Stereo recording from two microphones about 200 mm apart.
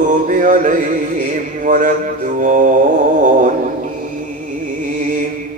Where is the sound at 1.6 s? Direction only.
40° right (ahead or behind).